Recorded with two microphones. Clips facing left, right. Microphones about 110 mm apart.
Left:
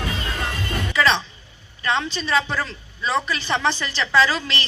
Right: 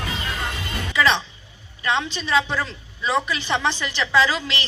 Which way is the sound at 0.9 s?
15° right (ahead or behind).